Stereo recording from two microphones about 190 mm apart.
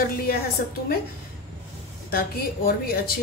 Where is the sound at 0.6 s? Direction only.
50° left (ahead or behind).